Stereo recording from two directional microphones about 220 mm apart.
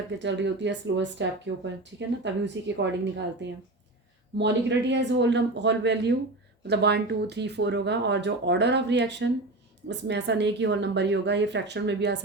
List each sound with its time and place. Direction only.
0.2 s speech: 55° right (ahead or behind)
4.4 s speech: 50° right (ahead or behind)